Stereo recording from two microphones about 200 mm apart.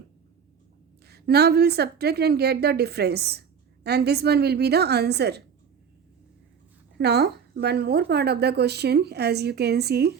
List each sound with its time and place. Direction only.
1.0 s a woman's voice: 55° right (ahead or behind)
7.0 s a woman's voice: 55° right (ahead or behind)